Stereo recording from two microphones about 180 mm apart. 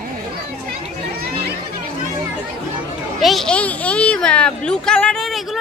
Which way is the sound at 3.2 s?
Centre (ahead or behind).